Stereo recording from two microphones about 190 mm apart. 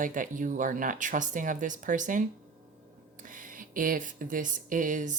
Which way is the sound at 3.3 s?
45° right (ahead or behind).